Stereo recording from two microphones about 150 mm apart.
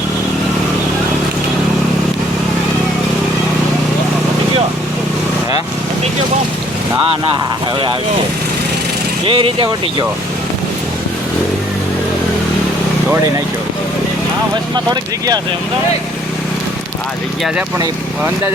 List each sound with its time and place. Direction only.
9.2 s speech: 35° right (ahead or behind)